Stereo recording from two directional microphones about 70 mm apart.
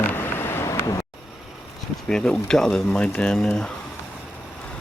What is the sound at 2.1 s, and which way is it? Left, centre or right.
Speech, centre.